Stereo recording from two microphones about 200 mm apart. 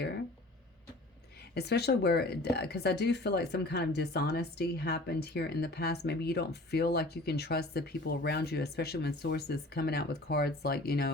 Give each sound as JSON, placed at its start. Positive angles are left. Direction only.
{"t": 1.5, "sound": "speech", "side_deg": 55}